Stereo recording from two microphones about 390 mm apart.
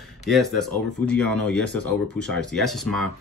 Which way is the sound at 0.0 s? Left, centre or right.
Centre.